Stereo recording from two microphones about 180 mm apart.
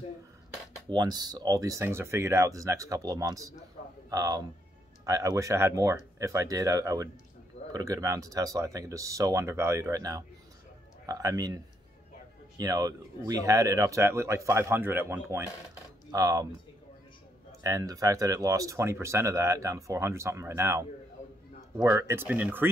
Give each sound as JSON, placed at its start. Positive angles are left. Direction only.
{"t": 0.8, "sound": "speech", "side_deg": -25}
{"t": 17.6, "sound": "speech", "side_deg": -20}